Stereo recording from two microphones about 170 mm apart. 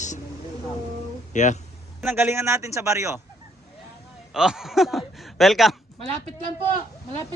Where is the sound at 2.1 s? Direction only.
15° right (ahead or behind).